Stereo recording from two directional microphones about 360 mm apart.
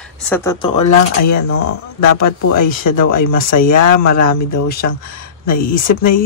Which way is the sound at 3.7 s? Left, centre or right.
Left.